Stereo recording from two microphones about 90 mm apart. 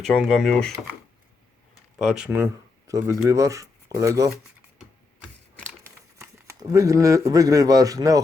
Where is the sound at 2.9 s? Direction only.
35° right (ahead or behind).